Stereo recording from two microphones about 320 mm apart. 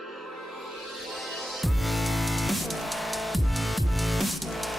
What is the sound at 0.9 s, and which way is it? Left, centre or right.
Music, centre.